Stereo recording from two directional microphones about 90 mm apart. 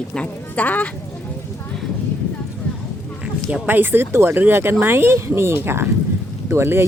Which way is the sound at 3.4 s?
20° right (ahead or behind).